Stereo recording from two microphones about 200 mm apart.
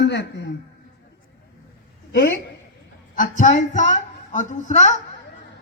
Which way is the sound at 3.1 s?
40° left (ahead or behind).